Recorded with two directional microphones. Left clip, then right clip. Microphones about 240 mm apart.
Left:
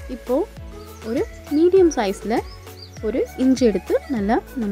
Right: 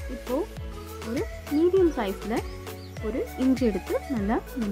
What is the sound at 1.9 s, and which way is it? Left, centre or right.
Speech, left.